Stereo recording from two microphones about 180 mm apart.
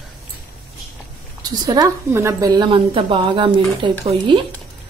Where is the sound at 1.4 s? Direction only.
20° right (ahead or behind).